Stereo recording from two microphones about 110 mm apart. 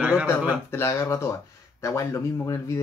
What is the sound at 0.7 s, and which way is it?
Speech, 25° left (ahead or behind).